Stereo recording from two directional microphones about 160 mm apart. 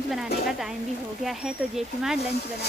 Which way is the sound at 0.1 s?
Centre (ahead or behind).